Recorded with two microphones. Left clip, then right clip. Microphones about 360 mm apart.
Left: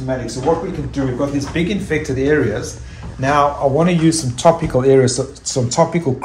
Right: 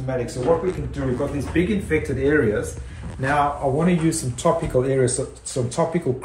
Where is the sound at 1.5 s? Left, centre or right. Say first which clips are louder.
Even; left.